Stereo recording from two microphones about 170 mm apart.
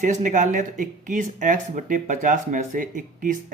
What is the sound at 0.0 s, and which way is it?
Speech, 45° right (ahead or behind).